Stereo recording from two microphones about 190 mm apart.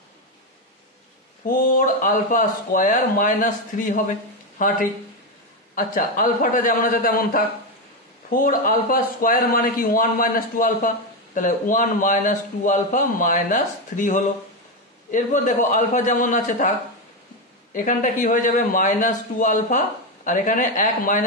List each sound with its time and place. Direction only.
1.4 s a man's voice: 45° left (ahead or behind)
17.7 s a man's voice: 45° left (ahead or behind)